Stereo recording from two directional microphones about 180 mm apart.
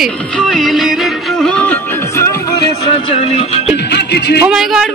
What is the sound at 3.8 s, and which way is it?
Music, 70° left (ahead or behind).